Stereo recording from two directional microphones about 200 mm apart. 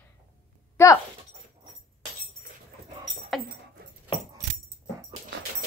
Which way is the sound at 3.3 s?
Centre (ahead or behind).